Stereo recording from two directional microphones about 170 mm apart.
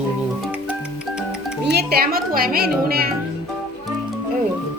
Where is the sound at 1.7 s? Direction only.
70° right (ahead or behind).